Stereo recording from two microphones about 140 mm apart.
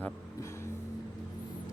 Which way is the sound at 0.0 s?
20° left (ahead or behind).